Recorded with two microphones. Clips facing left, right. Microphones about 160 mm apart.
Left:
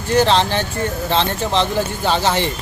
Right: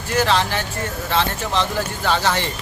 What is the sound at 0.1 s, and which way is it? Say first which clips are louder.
Speech: left 4 dB; 25° left (ahead or behind).